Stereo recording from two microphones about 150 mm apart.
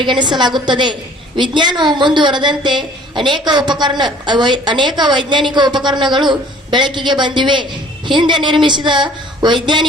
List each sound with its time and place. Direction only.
0.0 s a woman's voice: 30° right (ahead or behind)